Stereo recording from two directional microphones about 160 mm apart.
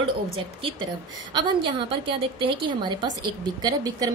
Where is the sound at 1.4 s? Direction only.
30° right (ahead or behind).